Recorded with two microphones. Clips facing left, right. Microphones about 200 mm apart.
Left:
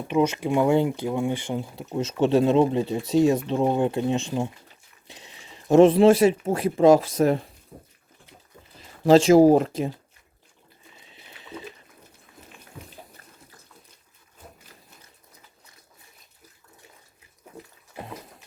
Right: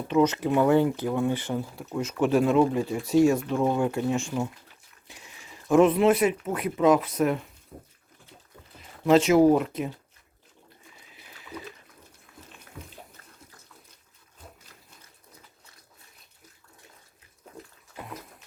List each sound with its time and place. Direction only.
0.1 s speech: 10° left (ahead or behind)
5.0 s dog: 25° left (ahead or behind)
5.6 s speech: 30° left (ahead or behind)
9.0 s speech: 30° left (ahead or behind)
11.0 s pour: 25° left (ahead or behind)
17.9 s a sound: 30° left (ahead or behind)